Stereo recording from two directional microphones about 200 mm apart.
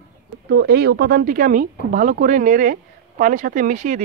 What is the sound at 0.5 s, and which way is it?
Speech, 55° right (ahead or behind).